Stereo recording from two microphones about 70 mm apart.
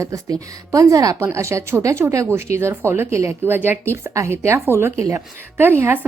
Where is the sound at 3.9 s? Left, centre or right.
Right.